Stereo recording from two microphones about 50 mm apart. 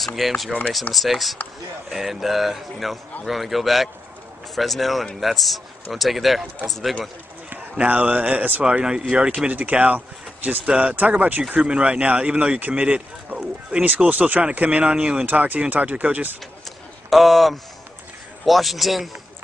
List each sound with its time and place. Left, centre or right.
0.0 s a man's voice: centre
7.7 s speech: right
8.6 s speech: centre
9.5 s speech: right
10.6 s speech: centre
10.9 s speech: right
11.6 s speech: right
15.2 s speech: right
17.1 s a man's voice: centre